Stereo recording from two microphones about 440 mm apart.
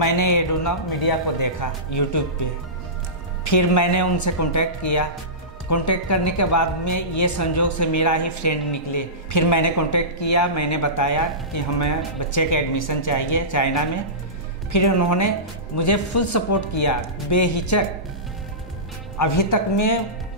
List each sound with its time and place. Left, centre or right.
0.0 s a woman's voice: left
19.1 s speech: left